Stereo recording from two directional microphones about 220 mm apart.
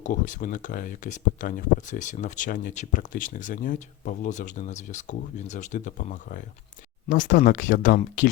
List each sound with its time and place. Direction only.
0.0 s speech: 35° left (ahead or behind)